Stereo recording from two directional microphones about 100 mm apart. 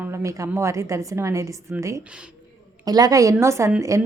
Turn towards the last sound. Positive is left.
turn(degrees=-30)  # may be behind; listen again after turning